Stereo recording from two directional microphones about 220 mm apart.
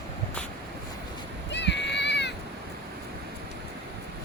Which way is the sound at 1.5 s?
50° left (ahead or behind).